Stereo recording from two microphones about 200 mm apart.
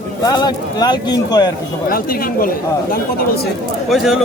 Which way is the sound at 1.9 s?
45° left (ahead or behind).